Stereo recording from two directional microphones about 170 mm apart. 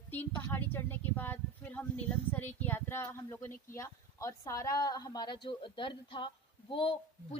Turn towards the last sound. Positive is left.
turn(degrees=30)  # may be behind; listen again after turning